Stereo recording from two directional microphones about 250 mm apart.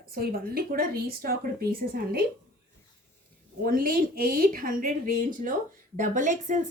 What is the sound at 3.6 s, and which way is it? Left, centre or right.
Speech, right.